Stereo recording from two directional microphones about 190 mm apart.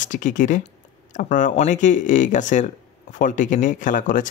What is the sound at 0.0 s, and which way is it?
Speech, 40° left (ahead or behind).